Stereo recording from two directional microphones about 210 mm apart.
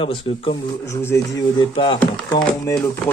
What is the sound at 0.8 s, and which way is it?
Music, 15° left (ahead or behind).